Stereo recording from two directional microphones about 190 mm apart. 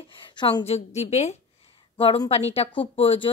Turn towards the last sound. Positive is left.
turn(degrees=30)  # may be behind; listen again after turning